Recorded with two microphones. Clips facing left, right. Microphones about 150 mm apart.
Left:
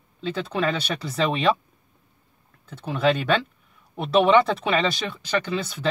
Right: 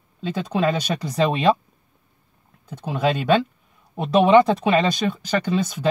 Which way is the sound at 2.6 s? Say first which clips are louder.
Even; 15° right (ahead or behind).